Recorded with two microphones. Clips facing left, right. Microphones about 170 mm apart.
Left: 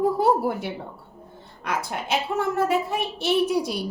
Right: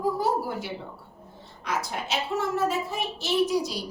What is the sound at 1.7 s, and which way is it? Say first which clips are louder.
Speech: left 2 dB; 55° left (ahead or behind).